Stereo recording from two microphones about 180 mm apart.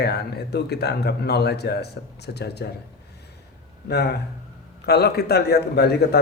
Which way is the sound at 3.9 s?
65° left (ahead or behind).